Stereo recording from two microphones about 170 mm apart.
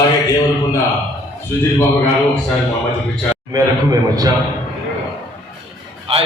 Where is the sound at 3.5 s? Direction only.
20° right (ahead or behind).